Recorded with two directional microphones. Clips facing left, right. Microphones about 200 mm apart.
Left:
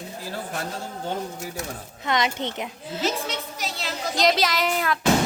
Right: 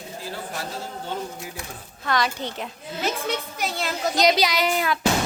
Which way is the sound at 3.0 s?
55° right (ahead or behind).